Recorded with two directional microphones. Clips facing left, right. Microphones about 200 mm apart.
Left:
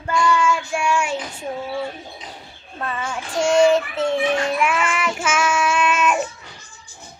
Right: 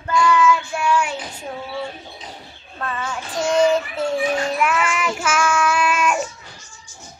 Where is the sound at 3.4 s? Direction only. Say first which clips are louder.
Left 2 dB; 25° left (ahead or behind).